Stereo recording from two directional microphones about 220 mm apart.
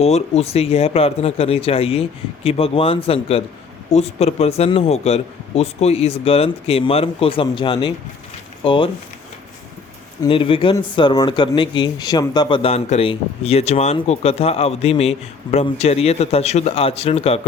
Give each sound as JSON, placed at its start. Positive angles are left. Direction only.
{"t": 0.0, "sound": "speech", "side_deg": 30}
{"t": 10.2, "sound": "speech", "side_deg": 25}